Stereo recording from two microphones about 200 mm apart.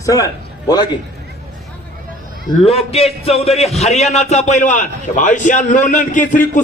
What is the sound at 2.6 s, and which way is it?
A man's voice, 30° left (ahead or behind).